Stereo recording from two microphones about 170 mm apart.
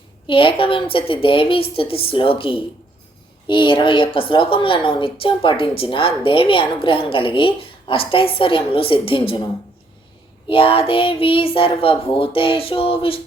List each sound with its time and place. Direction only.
0.3 s a woman's voice: 30° left (ahead or behind)
10.5 s a woman's voice: 35° left (ahead or behind)